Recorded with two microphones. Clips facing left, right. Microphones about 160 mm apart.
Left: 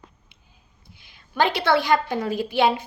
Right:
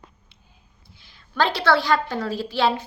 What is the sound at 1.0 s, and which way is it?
A woman's voice, 15° left (ahead or behind).